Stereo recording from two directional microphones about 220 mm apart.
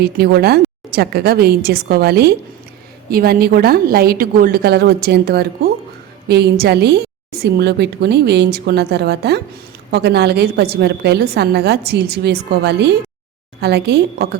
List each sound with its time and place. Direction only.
0.0 s a woman's voice: 45° right (ahead or behind)